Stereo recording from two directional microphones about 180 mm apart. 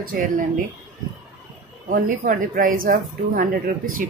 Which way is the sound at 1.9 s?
50° right (ahead or behind).